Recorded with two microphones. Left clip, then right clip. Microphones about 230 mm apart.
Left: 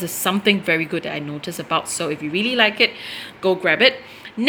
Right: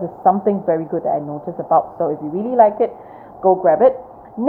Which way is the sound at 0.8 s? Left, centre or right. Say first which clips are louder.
Right 5 dB; centre.